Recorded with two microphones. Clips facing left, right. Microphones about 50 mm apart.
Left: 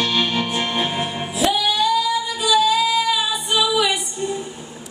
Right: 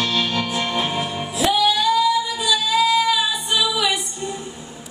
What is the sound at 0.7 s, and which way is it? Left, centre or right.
Music, centre.